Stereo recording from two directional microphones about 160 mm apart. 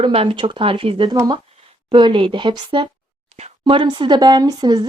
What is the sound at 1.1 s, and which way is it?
Speech, 20° right (ahead or behind).